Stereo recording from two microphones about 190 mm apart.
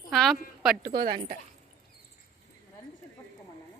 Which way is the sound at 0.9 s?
50° right (ahead or behind).